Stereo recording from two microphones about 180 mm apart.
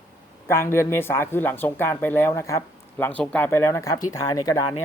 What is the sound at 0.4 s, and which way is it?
Speech, 15° left (ahead or behind).